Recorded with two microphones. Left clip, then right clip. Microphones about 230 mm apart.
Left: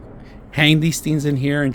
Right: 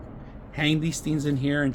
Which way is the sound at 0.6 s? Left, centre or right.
Left.